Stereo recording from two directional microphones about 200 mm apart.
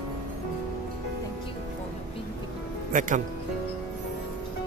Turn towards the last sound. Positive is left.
turn(degrees=-40)  # may be behind; listen again after turning